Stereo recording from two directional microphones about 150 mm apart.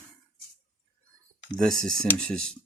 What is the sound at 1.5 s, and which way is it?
Speech, 5° left (ahead or behind).